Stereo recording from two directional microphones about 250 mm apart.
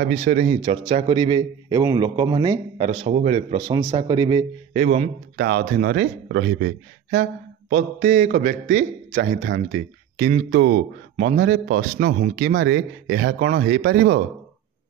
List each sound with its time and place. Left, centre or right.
0.1 s a man's voice: right
4.7 s a man's voice: right
9.4 s speech: right